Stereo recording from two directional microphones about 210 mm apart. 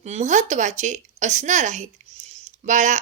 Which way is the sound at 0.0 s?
30° right (ahead or behind).